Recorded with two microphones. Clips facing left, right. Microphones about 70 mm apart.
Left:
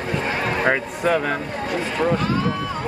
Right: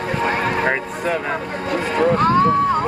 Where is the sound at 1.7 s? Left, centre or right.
Right.